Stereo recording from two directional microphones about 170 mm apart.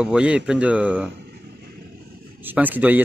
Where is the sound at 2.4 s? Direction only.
10° right (ahead or behind).